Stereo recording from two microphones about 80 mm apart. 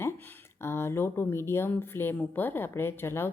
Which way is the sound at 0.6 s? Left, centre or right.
Left.